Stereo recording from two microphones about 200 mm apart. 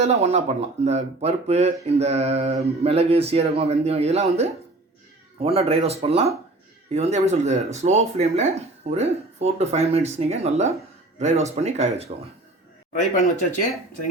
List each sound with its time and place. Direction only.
0.0 s speech: 35° right (ahead or behind)
12.9 s speech: 35° left (ahead or behind)